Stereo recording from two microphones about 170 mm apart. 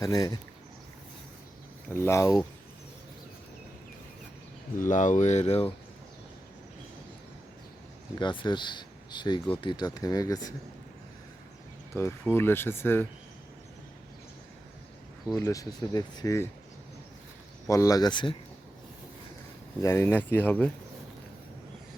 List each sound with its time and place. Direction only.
0.0 s speech: 20° left (ahead or behind)
1.9 s speech: 15° left (ahead or behind)
4.9 s speech: 45° left (ahead or behind)
8.2 s speech: 30° left (ahead or behind)
11.9 s speech: 15° left (ahead or behind)
15.4 s speech: 20° left (ahead or behind)
17.7 s speech: 20° left (ahead or behind)
19.8 s speech: 15° left (ahead or behind)